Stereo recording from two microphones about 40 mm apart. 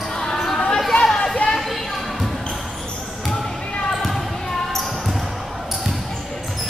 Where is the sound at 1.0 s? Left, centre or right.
Centre.